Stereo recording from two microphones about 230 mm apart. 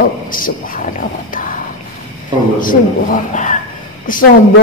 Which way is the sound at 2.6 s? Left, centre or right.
Left.